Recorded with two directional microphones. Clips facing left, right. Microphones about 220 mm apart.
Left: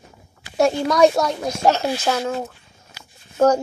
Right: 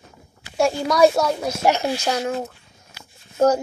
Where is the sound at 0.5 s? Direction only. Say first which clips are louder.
Left 1 dB; centre (ahead or behind).